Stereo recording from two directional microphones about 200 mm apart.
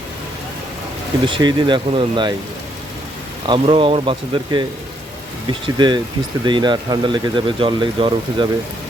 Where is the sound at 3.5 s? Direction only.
25° right (ahead or behind).